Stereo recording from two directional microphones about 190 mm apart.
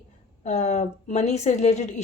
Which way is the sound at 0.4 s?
35° left (ahead or behind).